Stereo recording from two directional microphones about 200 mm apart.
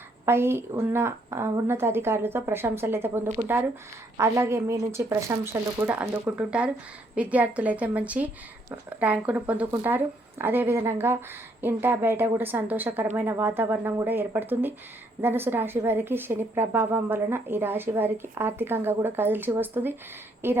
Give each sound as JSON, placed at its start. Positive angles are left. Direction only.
{"t": 0.3, "sound": "a woman's voice", "side_deg": -10}